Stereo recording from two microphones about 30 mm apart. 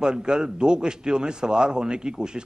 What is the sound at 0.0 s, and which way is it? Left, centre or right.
A man's voice, right.